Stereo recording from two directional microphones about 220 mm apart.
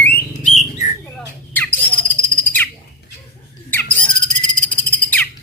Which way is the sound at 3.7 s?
10° left (ahead or behind).